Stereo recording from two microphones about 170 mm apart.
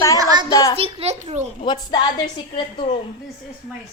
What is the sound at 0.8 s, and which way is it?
Speech, 35° right (ahead or behind).